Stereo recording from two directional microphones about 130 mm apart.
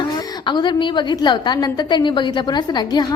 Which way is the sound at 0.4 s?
35° left (ahead or behind).